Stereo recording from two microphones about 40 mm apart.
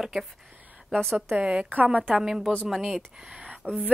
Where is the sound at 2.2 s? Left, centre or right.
Centre.